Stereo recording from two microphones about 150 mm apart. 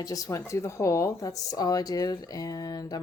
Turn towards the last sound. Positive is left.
turn(degrees=25)  # may be behind; listen again after turning